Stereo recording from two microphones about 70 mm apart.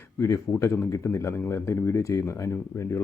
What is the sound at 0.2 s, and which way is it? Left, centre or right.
Speech, left.